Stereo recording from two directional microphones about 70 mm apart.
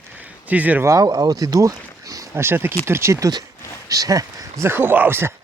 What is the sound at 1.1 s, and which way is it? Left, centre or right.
Speech, right.